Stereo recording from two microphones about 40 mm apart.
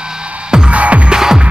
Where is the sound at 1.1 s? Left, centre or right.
Centre.